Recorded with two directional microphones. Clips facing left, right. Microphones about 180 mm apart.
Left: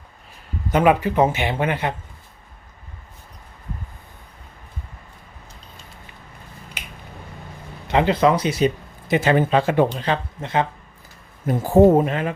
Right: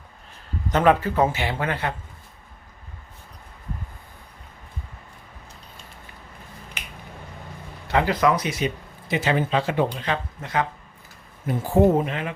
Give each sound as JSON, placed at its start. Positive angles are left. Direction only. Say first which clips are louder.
{"t": 0.7, "sound": "speech", "louder": "left 2 dB", "side_deg": 10}
{"t": 7.9, "sound": "speech", "louder": "left 3 dB", "side_deg": 25}
{"t": 9.0, "sound": "speech", "louder": "left 5 dB", "side_deg": 50}
{"t": 10.0, "sound": "speech", "louder": "left 4 dB", "side_deg": 30}
{"t": 11.4, "sound": "speech", "louder": "left 5 dB", "side_deg": 45}